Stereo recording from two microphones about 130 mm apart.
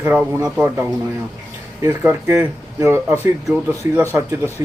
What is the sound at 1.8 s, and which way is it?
Speech, 20° right (ahead or behind).